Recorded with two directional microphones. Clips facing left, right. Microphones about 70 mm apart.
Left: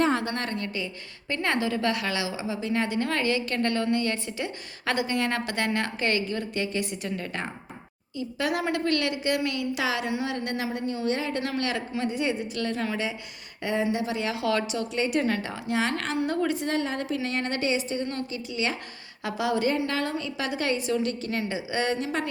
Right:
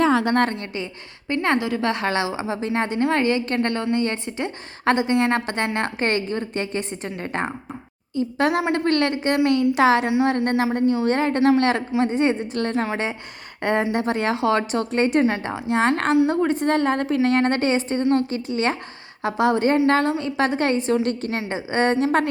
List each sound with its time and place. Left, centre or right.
0.5 s a woman's voice: right
13.6 s a woman's voice: right
14.3 s a woman's voice: right
14.7 s a woman's voice: right
15.2 s a woman's voice: right
16.1 s a woman's voice: right
16.5 s a woman's voice: right